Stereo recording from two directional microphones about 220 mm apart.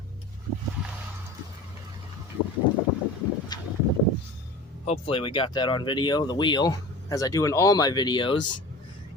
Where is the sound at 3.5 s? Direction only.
20° left (ahead or behind).